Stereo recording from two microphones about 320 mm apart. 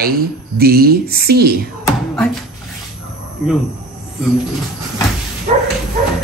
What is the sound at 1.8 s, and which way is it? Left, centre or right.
Speech, centre.